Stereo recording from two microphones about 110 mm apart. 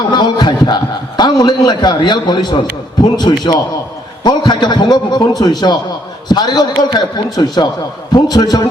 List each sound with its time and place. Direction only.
0.1 s a man's voice: 45° left (ahead or behind)